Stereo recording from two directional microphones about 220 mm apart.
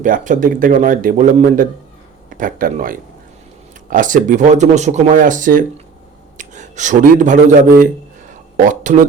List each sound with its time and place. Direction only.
0.0 s a man's voice: 35° right (ahead or behind)